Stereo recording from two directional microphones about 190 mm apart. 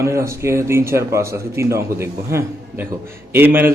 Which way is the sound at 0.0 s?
15° right (ahead or behind).